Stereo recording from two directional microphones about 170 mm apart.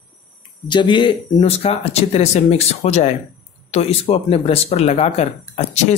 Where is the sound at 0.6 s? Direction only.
25° left (ahead or behind).